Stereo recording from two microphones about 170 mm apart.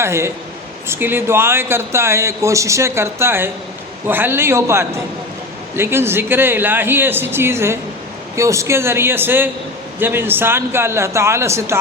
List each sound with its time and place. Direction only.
0.0 s a man's voice: 15° right (ahead or behind)